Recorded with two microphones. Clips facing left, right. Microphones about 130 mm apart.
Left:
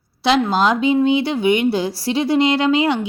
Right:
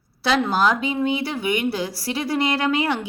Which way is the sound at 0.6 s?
25° left (ahead or behind).